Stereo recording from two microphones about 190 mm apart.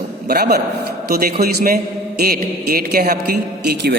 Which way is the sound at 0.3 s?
55° right (ahead or behind).